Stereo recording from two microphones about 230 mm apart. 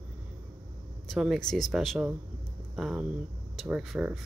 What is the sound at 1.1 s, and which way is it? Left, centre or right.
Speech, centre.